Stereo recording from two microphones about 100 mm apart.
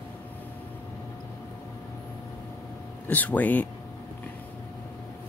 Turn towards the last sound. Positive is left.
turn(degrees=15)  # may be behind; listen again after turning